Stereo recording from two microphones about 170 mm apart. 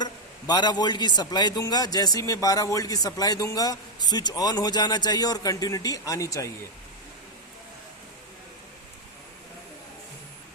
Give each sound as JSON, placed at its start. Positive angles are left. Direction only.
{"t": 0.0, "sound": "a man's voice", "side_deg": 25}